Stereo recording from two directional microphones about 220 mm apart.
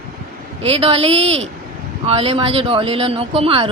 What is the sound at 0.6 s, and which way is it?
Speech, 25° right (ahead or behind).